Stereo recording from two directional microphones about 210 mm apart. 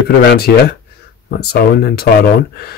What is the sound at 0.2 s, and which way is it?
Speech, 55° left (ahead or behind).